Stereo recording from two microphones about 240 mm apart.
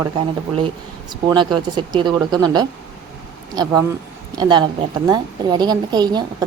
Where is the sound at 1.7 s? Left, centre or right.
Centre.